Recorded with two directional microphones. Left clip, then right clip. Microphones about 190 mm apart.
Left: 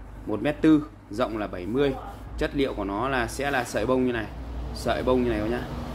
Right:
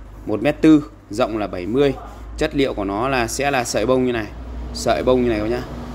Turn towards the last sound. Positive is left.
turn(degrees=-35)  # may be behind; listen again after turning